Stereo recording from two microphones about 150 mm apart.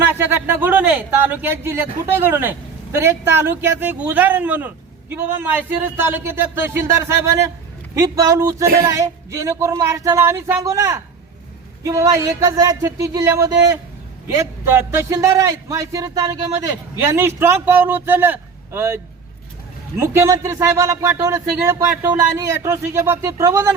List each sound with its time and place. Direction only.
0.0 s speech: 15° right (ahead or behind)
20.0 s speech: 20° right (ahead or behind)